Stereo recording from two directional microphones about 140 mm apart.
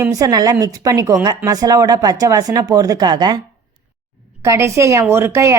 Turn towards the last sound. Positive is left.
turn(degrees=-20)  # may be behind; listen again after turning